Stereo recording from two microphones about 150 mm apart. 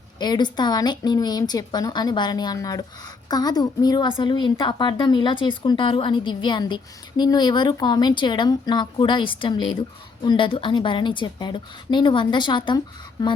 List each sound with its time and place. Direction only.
0.2 s speech: 30° left (ahead or behind)